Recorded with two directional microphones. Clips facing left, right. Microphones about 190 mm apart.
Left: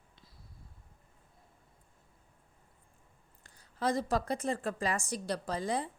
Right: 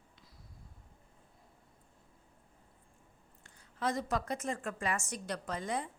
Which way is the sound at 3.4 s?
35° left (ahead or behind).